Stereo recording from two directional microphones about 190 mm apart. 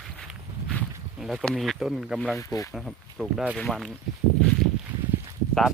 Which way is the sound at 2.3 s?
15° left (ahead or behind).